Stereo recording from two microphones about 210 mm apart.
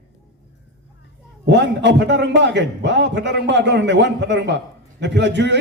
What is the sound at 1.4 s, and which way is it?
A man's voice, 55° right (ahead or behind).